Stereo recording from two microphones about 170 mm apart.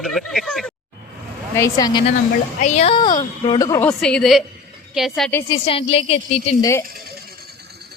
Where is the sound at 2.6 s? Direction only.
40° left (ahead or behind).